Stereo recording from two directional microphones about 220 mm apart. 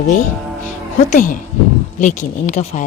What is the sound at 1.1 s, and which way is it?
Speech, 40° left (ahead or behind).